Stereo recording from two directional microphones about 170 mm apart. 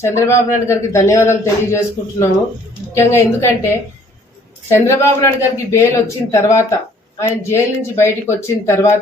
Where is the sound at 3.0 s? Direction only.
15° left (ahead or behind).